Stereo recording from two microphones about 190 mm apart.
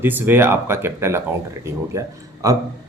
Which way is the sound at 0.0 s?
10° right (ahead or behind).